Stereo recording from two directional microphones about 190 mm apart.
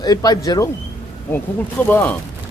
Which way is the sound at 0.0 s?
20° left (ahead or behind).